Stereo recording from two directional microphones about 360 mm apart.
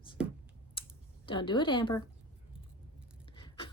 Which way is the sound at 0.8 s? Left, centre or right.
Centre.